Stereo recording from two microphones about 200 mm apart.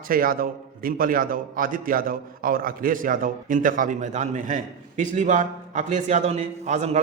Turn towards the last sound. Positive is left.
turn(degrees=-35)  # may be behind; listen again after turning